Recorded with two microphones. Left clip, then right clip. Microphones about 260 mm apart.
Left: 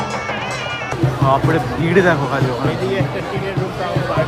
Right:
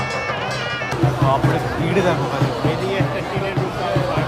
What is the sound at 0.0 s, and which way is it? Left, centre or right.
Music, left.